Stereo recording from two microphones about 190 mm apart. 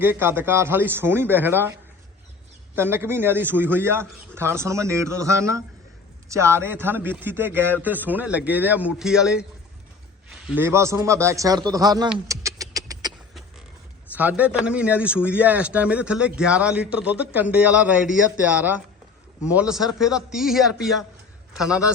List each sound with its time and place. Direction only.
0.0 s a man's voice: 10° right (ahead or behind)
2.7 s a man's voice: 10° right (ahead or behind)
10.5 s a man's voice: 10° right (ahead or behind)
12.3 s beatboxing: 15° right (ahead or behind)
14.1 s a man's voice: 10° right (ahead or behind)